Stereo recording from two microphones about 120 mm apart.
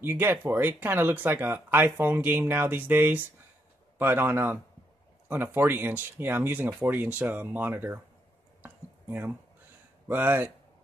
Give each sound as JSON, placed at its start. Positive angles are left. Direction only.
{"t": 0.0, "sound": "speech", "side_deg": -20}
{"t": 8.6, "sound": "a sound", "side_deg": -15}
{"t": 10.0, "sound": "speech", "side_deg": -15}